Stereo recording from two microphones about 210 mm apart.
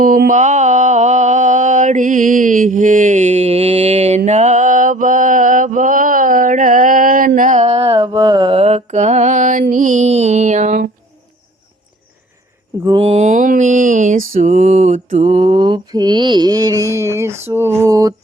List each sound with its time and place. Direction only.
0.0 s mantra: 40° right (ahead or behind)
12.8 s speech: 25° right (ahead or behind)
14.3 s mantra: 35° right (ahead or behind); by 18.1 s 15° right (ahead or behind)